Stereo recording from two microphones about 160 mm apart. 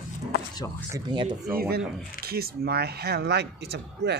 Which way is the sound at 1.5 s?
75° right (ahead or behind).